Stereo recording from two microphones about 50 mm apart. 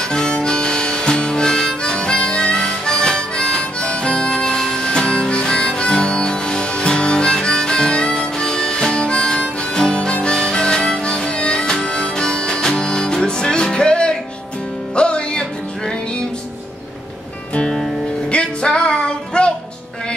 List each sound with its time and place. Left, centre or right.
0.1 s harmonica: centre
11.7 s music: centre
18.3 s music: centre